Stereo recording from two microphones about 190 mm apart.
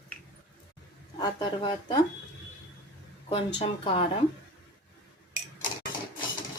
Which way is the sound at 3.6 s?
30° left (ahead or behind).